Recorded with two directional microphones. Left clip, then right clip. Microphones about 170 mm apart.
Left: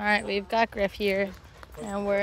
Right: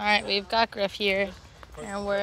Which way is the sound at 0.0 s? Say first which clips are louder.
Right 2 dB; 30° left (ahead or behind).